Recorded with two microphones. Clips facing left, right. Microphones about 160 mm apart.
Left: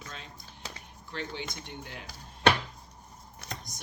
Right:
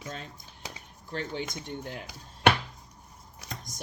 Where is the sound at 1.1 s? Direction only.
45° right (ahead or behind).